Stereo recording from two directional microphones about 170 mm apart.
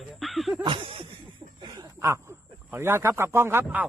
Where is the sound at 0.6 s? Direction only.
30° right (ahead or behind); by 3.9 s 10° right (ahead or behind).